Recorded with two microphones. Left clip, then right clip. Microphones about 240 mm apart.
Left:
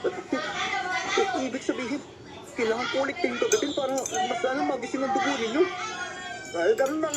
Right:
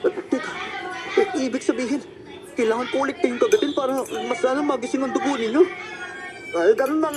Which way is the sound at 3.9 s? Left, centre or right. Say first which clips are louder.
Right 3 dB; right.